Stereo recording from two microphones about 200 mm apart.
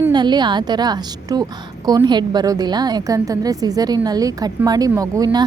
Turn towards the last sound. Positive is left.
turn(degrees=-15)  # may be behind; listen again after turning